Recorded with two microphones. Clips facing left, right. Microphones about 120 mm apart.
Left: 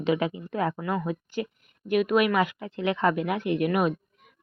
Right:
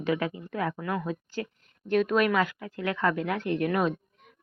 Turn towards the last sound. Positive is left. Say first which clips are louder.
# left 2 dB
turn(degrees=10)  # may be behind; listen again after turning